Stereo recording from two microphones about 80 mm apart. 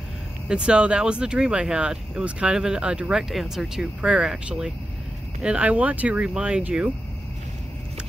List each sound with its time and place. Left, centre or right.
0.5 s speech: centre